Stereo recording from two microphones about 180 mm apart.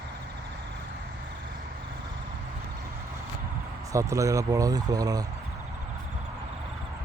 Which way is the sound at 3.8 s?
15° right (ahead or behind).